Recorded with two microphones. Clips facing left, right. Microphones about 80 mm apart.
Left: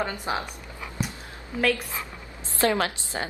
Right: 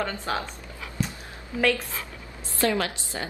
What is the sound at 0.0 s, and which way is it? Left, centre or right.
Speech, centre.